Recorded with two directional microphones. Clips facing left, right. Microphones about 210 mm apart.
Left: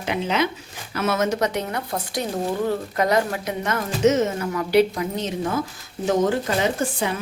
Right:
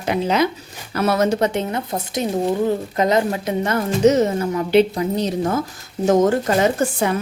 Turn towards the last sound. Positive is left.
turn(degrees=-45)  # may be behind; listen again after turning